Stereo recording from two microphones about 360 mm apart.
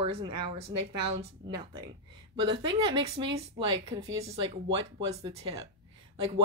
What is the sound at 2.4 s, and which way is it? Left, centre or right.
Speech, centre.